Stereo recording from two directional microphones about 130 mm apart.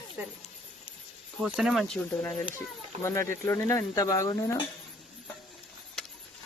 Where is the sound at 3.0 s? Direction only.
20° left (ahead or behind).